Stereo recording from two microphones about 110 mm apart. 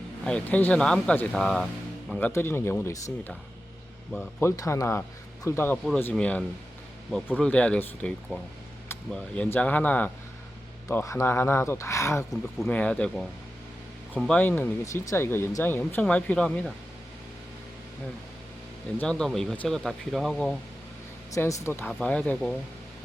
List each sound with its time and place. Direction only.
0.3 s speech: 10° left (ahead or behind)
2.2 s speech: 20° left (ahead or behind)
4.4 s speech: 25° left (ahead or behind)
5.7 s speech: 5° left (ahead or behind)
10.8 s speech: 25° left (ahead or behind)
12.3 s speech: centre (ahead or behind)
18.9 s speech: 5° left (ahead or behind)
21.3 s speech: 25° left (ahead or behind)
21.9 s speech: 10° left (ahead or behind)